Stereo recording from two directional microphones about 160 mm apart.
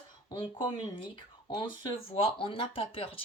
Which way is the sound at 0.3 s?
30° left (ahead or behind).